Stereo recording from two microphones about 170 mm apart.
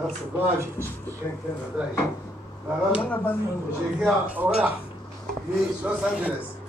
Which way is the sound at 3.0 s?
10° left (ahead or behind).